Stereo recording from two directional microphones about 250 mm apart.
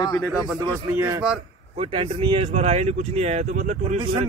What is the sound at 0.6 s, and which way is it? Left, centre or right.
A man's voice, centre.